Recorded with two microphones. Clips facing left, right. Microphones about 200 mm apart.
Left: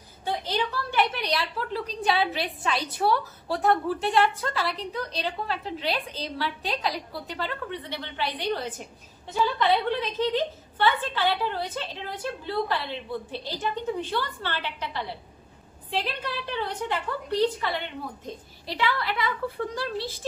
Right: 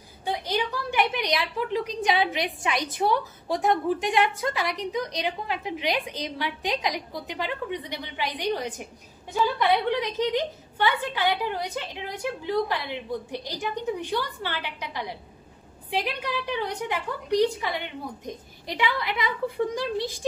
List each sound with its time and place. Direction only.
0.2 s a woman's voice: 15° right (ahead or behind)